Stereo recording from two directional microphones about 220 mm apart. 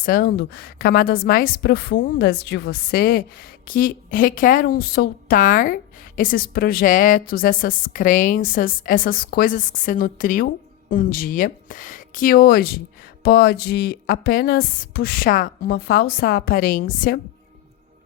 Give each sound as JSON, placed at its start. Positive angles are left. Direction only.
{"t": 0.0, "sound": "a woman's voice", "side_deg": 40}